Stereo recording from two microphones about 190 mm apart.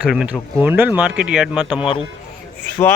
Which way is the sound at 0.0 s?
5° right (ahead or behind).